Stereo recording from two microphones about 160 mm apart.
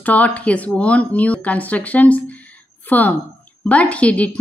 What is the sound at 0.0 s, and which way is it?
A woman's voice, 10° left (ahead or behind).